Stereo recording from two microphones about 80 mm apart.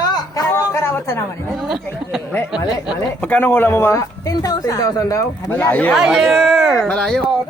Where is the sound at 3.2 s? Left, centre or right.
Left.